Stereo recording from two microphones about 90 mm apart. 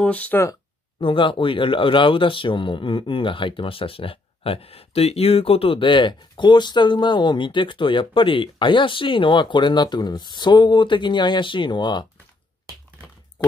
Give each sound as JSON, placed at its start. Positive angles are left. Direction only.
{"t": 0.0, "sound": "speech", "side_deg": 15}
{"t": 0.9, "sound": "speech", "side_deg": 70}